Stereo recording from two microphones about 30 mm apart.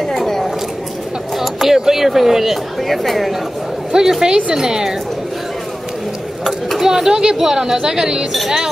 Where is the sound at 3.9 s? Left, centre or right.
Right.